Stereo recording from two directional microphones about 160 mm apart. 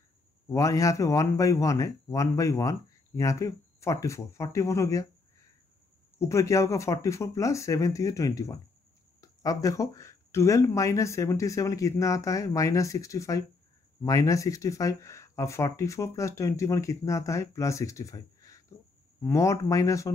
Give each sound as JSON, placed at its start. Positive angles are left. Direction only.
{"t": 0.5, "sound": "speech", "side_deg": 20}
{"t": 6.1, "sound": "speech", "side_deg": 20}